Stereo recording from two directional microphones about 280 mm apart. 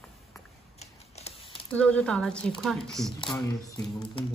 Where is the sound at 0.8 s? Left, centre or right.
Left.